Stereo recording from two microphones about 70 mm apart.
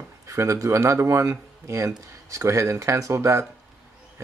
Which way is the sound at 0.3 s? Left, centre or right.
Right.